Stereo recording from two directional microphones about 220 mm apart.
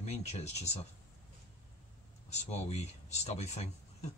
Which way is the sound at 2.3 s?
30° left (ahead or behind).